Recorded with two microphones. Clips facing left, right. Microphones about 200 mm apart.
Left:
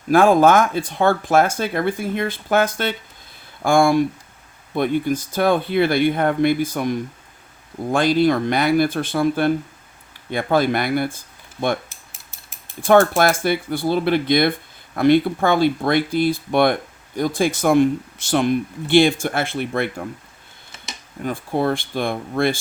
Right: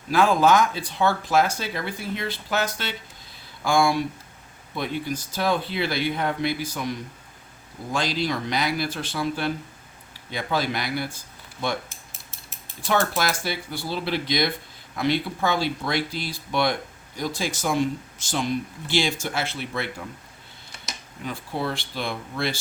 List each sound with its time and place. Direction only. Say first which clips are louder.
0.1 s speech: left 6 dB; 50° left (ahead or behind)
7.9 s speech: left 10 dB; 55° left (ahead or behind)
12.8 s speech: left 10 dB; 55° left (ahead or behind)
21.2 s speech: left 8 dB; 55° left (ahead or behind)